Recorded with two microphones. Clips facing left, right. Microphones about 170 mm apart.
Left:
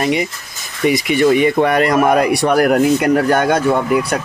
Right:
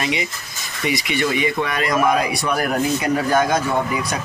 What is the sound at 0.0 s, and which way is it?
Speech, 50° left (ahead or behind).